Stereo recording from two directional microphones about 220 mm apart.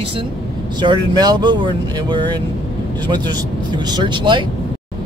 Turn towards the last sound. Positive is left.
turn(degrees=-20)  # may be behind; listen again after turning